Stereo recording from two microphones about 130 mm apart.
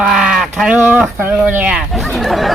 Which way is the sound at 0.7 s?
15° right (ahead or behind).